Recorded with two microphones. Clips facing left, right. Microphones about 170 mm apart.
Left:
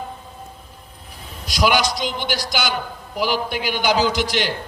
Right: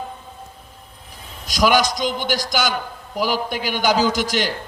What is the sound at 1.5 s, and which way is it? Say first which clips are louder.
A man's voice: right 2 dB; 45° right (ahead or behind).